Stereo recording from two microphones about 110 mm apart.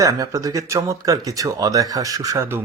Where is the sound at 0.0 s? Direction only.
30° right (ahead or behind).